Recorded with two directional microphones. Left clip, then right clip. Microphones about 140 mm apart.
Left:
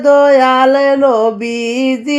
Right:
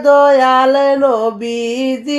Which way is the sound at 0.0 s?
30° left (ahead or behind).